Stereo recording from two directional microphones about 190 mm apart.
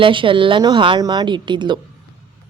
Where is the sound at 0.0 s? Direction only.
25° right (ahead or behind).